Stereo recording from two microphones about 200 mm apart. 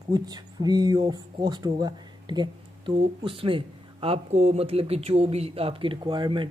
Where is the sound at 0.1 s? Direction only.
20° right (ahead or behind).